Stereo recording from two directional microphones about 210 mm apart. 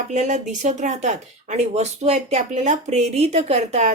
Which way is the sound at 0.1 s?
35° right (ahead or behind).